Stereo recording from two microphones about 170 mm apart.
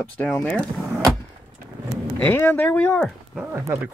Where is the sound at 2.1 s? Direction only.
10° left (ahead or behind).